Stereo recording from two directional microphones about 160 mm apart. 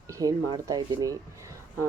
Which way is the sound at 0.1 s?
20° right (ahead or behind).